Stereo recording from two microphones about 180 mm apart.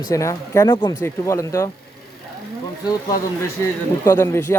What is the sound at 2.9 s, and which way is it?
Speech, 20° left (ahead or behind).